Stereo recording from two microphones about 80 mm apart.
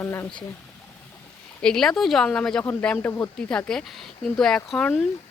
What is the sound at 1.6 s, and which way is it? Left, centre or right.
Speech, centre.